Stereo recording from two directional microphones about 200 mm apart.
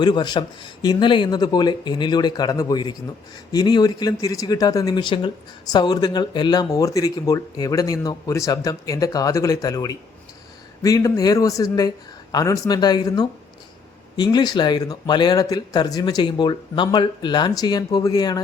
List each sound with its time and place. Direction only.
0.0 s speech: 20° left (ahead or behind)